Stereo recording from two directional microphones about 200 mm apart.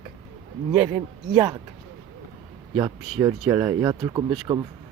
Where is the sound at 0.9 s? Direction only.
20° right (ahead or behind).